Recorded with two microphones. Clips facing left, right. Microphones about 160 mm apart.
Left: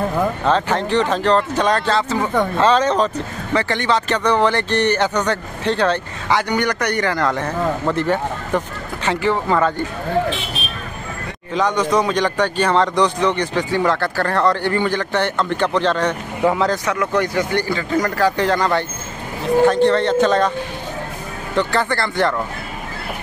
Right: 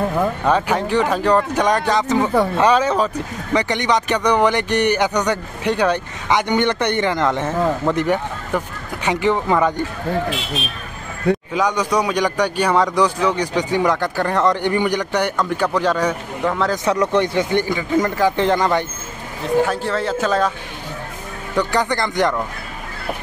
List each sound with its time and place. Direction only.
0.2 s speech: 10° right (ahead or behind)
11.5 s speech: 10° right (ahead or behind)
16.4 s speech: centre (ahead or behind)
16.8 s speech: 30° right (ahead or behind)
19.6 s speech: 5° right (ahead or behind)
21.5 s speech: 15° right (ahead or behind)